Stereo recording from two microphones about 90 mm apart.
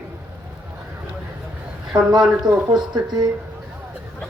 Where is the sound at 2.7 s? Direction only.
55° right (ahead or behind).